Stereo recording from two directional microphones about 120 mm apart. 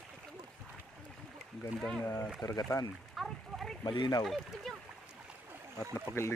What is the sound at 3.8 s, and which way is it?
Speech, 35° left (ahead or behind).